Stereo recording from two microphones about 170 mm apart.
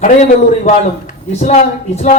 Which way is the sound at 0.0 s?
45° left (ahead or behind).